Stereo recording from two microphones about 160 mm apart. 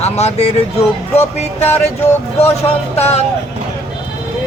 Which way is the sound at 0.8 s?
15° left (ahead or behind).